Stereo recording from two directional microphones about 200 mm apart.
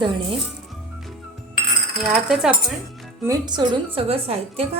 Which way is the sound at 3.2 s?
20° right (ahead or behind).